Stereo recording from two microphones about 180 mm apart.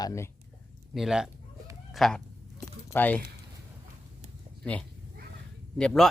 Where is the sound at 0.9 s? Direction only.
Centre (ahead or behind).